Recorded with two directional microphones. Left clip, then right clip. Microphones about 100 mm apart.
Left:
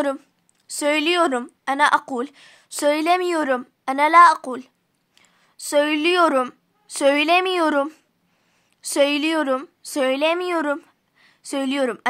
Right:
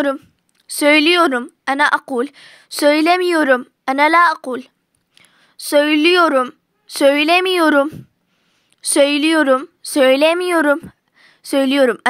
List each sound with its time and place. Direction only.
0.0 s a woman's voice: 20° right (ahead or behind)
0.7 s a woman's voice: 40° right (ahead or behind)
7.8 s a woman's voice: 20° right (ahead or behind)
8.8 s a woman's voice: 40° right (ahead or behind)
10.1 s speech: 65° right (ahead or behind)
10.9 s a sound: 55° right (ahead or behind)